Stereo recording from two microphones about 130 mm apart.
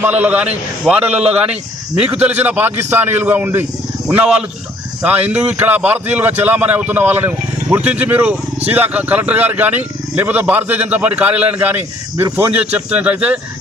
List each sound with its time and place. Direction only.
0.0 s speech: 15° right (ahead or behind)